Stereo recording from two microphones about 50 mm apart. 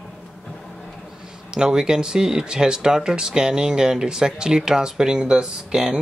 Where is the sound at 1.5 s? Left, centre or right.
Centre.